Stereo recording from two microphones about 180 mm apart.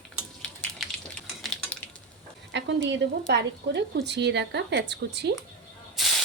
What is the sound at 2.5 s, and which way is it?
Speech, 75° right (ahead or behind).